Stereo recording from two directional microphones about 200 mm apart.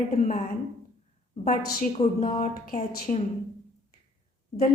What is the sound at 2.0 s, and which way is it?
Speech, 25° left (ahead or behind).